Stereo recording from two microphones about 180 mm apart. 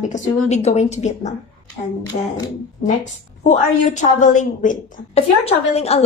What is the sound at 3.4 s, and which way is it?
A woman's voice, 45° left (ahead or behind).